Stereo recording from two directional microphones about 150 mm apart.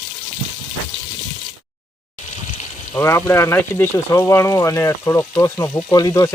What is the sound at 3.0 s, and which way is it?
Speech, 20° left (ahead or behind).